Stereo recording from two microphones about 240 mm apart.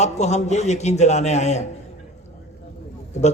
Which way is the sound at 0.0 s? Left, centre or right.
Left.